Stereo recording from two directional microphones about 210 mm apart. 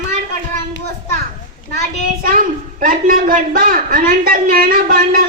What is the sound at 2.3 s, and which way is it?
A man's voice, 40° right (ahead or behind).